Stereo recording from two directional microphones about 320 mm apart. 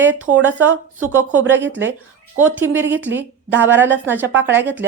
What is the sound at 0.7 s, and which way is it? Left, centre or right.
Speech, right.